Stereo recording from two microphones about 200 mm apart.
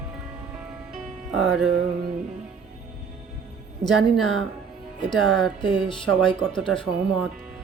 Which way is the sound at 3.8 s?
Centre (ahead or behind).